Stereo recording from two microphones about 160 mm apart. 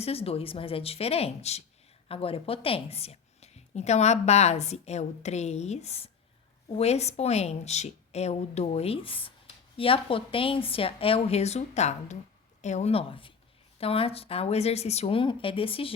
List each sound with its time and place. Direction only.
0.0 s a woman's voice: 40° left (ahead or behind)